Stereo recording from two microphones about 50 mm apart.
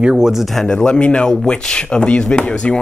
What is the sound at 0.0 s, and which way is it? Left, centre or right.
Speech, centre.